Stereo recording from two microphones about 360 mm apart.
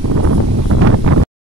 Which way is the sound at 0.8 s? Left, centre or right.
Right.